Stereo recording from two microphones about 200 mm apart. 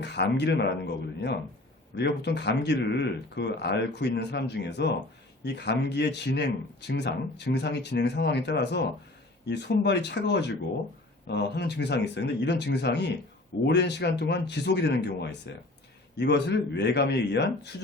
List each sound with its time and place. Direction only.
0.0 s speech: 60° left (ahead or behind)